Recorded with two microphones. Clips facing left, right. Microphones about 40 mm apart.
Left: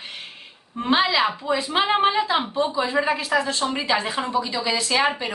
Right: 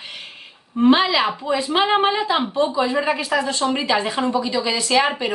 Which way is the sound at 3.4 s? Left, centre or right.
Centre.